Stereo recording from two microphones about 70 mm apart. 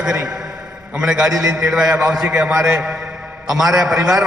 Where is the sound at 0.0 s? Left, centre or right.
Centre.